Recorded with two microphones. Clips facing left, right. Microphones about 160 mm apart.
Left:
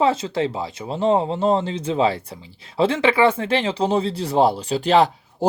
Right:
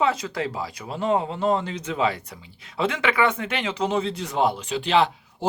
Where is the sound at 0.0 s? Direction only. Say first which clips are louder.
Left 4 dB; 25° left (ahead or behind).